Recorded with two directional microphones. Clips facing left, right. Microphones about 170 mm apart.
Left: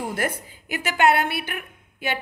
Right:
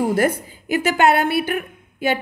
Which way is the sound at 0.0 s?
35° right (ahead or behind).